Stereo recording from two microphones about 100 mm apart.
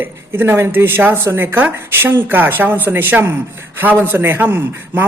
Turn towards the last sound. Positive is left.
turn(degrees=-25)  # may be behind; listen again after turning